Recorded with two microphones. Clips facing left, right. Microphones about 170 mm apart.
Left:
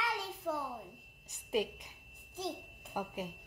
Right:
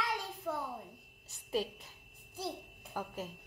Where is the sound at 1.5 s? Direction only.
15° left (ahead or behind).